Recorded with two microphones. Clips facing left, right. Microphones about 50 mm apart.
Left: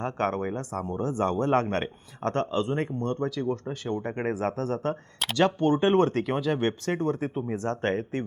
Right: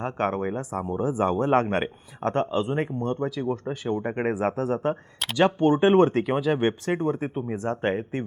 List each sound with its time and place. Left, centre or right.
0.0 s speech: centre